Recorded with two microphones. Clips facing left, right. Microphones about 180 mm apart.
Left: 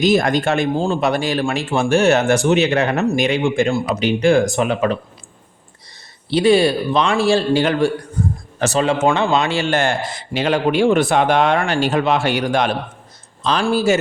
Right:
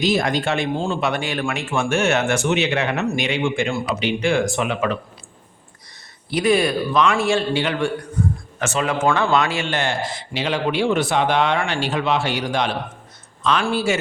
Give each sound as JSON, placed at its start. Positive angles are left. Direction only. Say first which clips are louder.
{"t": 0.0, "sound": "speech", "louder": "left 4 dB", "side_deg": 50}
{"t": 6.3, "sound": "a man's voice", "louder": "left 4 dB", "side_deg": 30}
{"t": 9.6, "sound": "speech", "louder": "left 5 dB", "side_deg": 50}
{"t": 13.4, "sound": "speech", "louder": "left 3 dB", "side_deg": 35}